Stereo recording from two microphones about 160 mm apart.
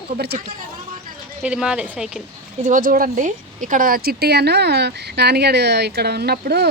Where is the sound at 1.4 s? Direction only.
5° right (ahead or behind).